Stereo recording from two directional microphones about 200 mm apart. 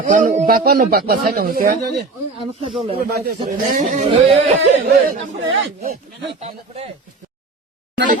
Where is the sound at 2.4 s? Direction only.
30° right (ahead or behind).